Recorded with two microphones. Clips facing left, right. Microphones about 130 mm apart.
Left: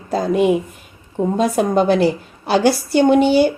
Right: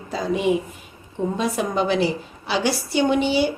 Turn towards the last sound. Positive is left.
turn(degrees=50)  # may be behind; listen again after turning